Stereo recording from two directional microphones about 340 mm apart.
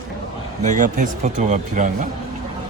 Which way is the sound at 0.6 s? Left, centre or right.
Right.